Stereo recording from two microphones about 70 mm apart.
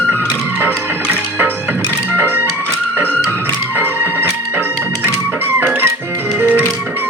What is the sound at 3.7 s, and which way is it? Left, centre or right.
Music, right.